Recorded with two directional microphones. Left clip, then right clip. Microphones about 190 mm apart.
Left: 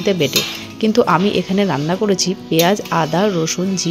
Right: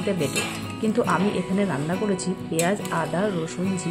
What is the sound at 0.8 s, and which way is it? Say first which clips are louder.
Speech: left 9 dB; 45° left (ahead or behind).